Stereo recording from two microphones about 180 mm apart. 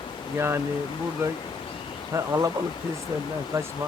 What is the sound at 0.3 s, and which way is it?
Speech, 15° right (ahead or behind).